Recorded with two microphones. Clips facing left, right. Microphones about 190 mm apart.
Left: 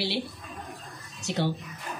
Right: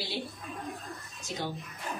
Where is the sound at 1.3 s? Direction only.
75° left (ahead or behind).